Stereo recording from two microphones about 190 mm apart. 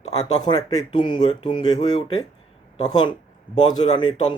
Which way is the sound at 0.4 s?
20° left (ahead or behind).